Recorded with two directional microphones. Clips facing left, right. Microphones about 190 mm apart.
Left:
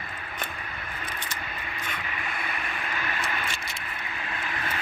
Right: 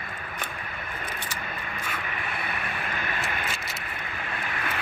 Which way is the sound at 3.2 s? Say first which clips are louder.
Right 1 dB; 5° right (ahead or behind).